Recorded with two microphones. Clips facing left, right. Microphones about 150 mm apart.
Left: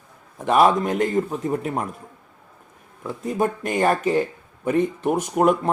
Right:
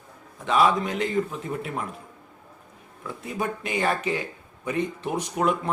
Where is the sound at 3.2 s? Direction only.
45° left (ahead or behind).